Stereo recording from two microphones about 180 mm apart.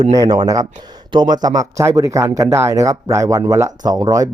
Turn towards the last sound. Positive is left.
turn(degrees=-20)  # may be behind; listen again after turning